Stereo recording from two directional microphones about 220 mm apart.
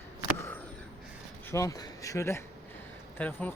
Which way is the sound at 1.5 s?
15° left (ahead or behind).